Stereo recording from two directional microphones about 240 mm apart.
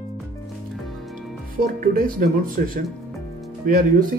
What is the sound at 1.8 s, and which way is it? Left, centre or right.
Speech, right.